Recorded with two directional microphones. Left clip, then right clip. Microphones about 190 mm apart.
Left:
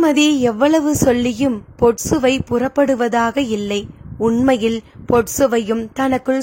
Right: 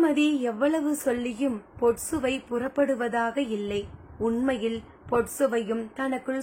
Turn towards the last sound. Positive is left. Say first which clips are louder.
# left 12 dB
turn(degrees=55)  # may be behind; listen again after turning